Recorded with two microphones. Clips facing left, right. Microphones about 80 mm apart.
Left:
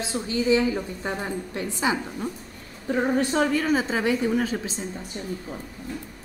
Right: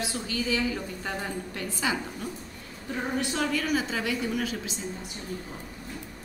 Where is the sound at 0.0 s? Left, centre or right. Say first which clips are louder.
Left 5 dB; left.